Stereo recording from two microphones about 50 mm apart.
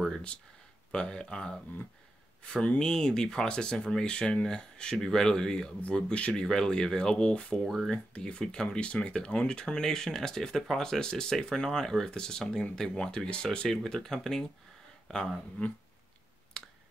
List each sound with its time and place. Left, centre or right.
0.9 s speech: centre
2.4 s speech: left
2.8 s speech: centre
7.6 s speech: centre
7.9 s speech: centre